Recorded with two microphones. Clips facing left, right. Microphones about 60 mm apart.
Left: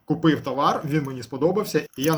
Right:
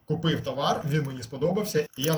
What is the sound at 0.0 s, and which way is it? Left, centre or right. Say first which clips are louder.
Speech: left 7 dB; left.